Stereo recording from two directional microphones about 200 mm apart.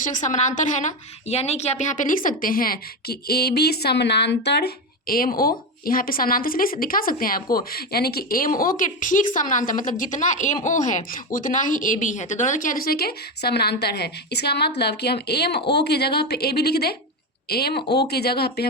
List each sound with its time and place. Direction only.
0.0 s a woman's voice: 40° left (ahead or behind)